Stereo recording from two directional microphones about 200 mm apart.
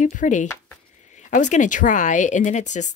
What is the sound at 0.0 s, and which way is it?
Speech, 40° left (ahead or behind).